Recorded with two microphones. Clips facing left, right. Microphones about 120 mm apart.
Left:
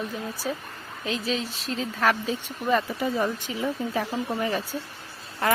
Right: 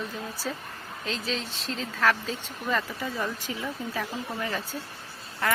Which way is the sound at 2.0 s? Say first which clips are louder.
Left 1 dB; 15° left (ahead or behind).